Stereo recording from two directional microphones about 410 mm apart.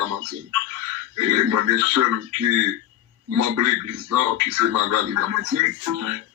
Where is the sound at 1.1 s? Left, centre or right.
Right.